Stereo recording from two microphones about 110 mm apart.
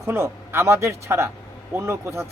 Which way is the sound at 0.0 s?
25° right (ahead or behind).